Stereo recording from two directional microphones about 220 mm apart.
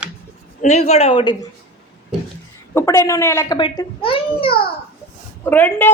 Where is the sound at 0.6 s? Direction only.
30° left (ahead or behind).